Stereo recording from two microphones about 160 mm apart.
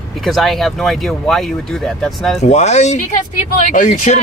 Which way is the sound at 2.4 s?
45° left (ahead or behind).